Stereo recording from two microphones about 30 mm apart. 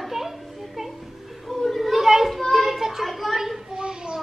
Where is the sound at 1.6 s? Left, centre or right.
Centre.